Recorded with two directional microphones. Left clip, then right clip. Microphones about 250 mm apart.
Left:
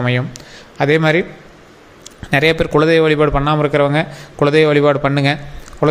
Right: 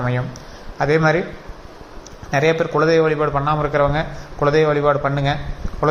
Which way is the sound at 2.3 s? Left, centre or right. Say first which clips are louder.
Left 4 dB; left.